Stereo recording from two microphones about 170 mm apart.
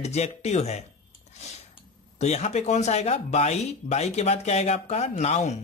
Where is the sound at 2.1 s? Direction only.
40° left (ahead or behind).